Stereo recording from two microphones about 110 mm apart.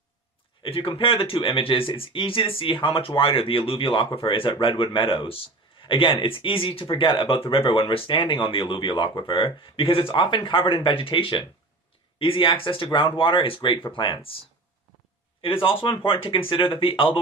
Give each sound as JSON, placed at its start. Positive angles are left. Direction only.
{"t": 0.6, "sound": "speech", "side_deg": 55}
{"t": 15.4, "sound": "speech", "side_deg": 55}